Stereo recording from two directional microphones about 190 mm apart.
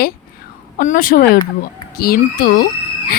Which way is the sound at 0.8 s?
45° left (ahead or behind).